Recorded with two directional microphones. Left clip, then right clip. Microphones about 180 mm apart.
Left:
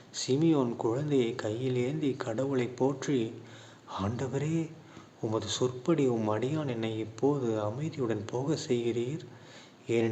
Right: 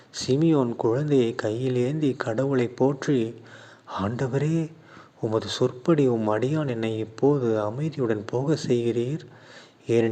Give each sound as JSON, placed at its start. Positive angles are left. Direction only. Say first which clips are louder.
{"t": 0.1, "sound": "speech", "louder": "right 5 dB", "side_deg": -35}